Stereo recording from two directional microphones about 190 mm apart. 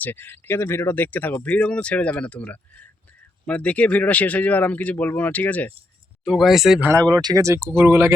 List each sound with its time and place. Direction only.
0.0 s speech: 10° left (ahead or behind); by 6.9 s 5° right (ahead or behind)
7.1 s speech: 20° right (ahead or behind)